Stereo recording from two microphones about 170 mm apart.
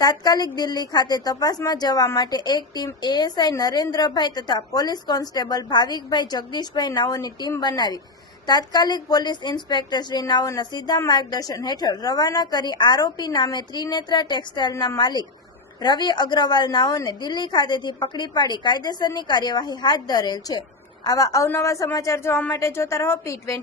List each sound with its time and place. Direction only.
0.0 s a woman's voice: 25° left (ahead or behind)